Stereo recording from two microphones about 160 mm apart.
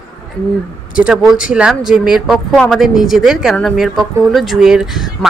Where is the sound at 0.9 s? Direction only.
5° right (ahead or behind).